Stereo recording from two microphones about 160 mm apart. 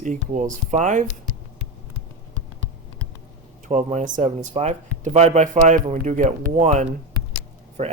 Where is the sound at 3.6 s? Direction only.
50° right (ahead or behind).